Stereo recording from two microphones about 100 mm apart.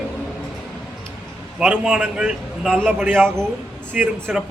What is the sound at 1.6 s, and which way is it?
A man's voice, 10° right (ahead or behind).